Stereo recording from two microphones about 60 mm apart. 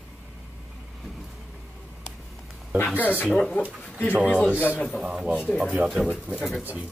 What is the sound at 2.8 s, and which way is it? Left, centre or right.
Speech, left.